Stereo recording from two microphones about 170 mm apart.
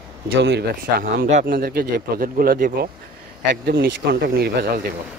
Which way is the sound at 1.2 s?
45° right (ahead or behind).